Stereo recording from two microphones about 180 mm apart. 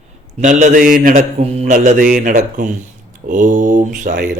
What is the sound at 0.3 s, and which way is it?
Speech, 45° right (ahead or behind).